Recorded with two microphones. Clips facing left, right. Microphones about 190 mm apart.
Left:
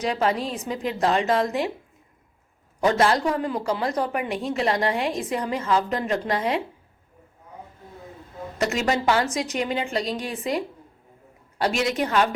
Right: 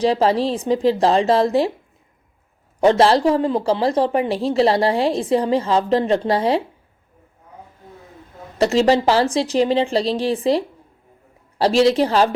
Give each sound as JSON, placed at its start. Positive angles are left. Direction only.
{"t": 0.0, "sound": "a woman's voice", "side_deg": -30}
{"t": 2.8, "sound": "a woman's voice", "side_deg": -30}
{"t": 8.5, "sound": "a woman's voice", "side_deg": -30}